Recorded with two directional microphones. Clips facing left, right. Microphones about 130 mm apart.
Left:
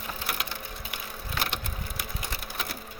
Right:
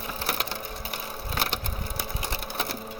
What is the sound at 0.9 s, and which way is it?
Sewing machine, 35° right (ahead or behind).